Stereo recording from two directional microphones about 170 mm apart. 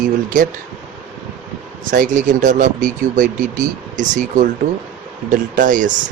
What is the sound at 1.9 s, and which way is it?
Speech, 50° right (ahead or behind).